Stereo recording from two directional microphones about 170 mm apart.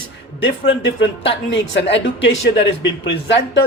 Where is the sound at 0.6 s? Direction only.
90° left.